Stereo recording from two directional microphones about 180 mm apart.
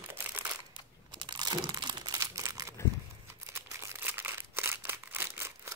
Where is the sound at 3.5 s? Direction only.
10° right (ahead or behind).